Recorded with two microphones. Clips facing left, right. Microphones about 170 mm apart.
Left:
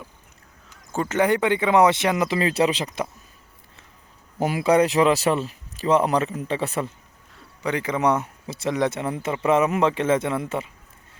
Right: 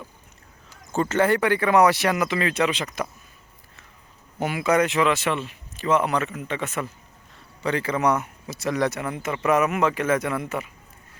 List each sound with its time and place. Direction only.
0.9 s speech: 15° left (ahead or behind); by 3.1 s 30° left (ahead or behind)
4.4 s speech: 35° left (ahead or behind)
7.6 s speech: 15° left (ahead or behind)